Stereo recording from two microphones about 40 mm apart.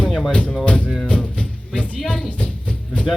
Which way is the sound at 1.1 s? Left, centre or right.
Left.